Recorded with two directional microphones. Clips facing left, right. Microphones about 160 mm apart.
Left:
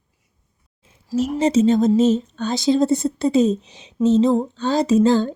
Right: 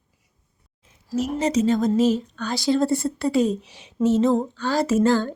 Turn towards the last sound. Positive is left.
turn(degrees=20)  # may be behind; listen again after turning